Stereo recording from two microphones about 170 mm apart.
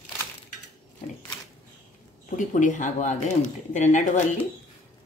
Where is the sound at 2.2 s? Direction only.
45° left (ahead or behind).